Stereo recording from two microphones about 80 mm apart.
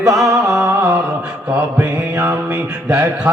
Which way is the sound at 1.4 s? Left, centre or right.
Right.